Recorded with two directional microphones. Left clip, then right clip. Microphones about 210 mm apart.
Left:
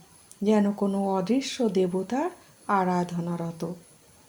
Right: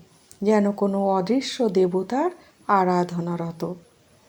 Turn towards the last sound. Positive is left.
turn(degrees=-10)  # may be behind; listen again after turning